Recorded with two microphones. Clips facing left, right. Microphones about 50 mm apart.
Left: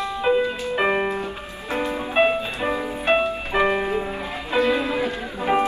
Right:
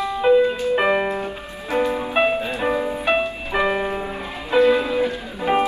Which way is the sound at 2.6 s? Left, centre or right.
Centre.